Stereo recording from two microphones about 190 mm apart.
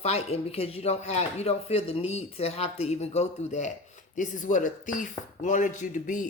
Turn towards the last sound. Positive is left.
turn(degrees=40)  # may be behind; listen again after turning